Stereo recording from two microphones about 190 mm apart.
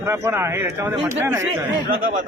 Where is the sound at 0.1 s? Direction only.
15° right (ahead or behind).